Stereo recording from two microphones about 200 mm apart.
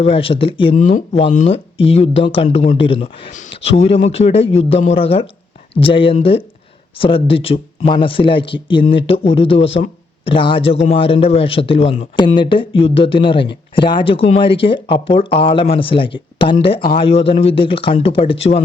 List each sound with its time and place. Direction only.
0.0 s speech: 30° left (ahead or behind)
0.8 s speech: 35° left (ahead or behind)
3.2 s a man's voice: 40° left (ahead or behind)